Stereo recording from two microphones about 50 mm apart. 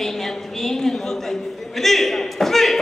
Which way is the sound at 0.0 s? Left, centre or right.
Centre.